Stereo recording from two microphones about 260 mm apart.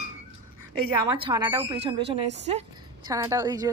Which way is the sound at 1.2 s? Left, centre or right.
Centre.